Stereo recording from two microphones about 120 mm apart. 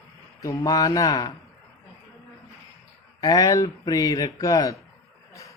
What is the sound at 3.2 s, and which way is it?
A man's voice, 30° left (ahead or behind).